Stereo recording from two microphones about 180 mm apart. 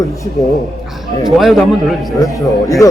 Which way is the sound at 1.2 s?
Centre (ahead or behind).